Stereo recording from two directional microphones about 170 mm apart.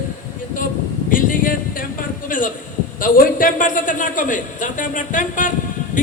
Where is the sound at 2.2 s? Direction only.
50° left (ahead or behind).